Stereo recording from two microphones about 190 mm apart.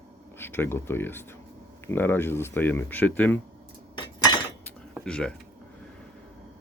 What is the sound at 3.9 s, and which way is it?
Cutlery, 25° left (ahead or behind).